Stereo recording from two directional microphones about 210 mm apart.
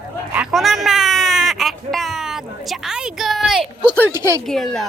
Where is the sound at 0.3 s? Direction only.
Centre (ahead or behind).